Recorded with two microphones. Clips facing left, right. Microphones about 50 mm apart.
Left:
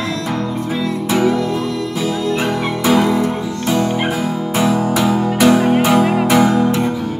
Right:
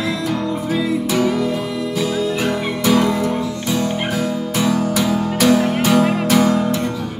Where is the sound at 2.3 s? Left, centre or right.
Left.